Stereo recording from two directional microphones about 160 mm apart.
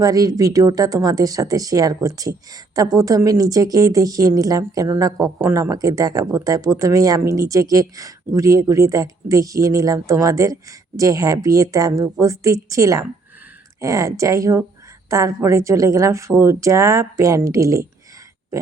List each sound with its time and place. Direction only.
0.0 s speech: 20° right (ahead or behind)